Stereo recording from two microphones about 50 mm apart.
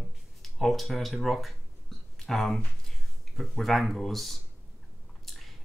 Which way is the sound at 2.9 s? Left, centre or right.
Centre.